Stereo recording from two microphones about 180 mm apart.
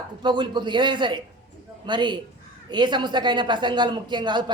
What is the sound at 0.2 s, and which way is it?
Speech, 25° right (ahead or behind).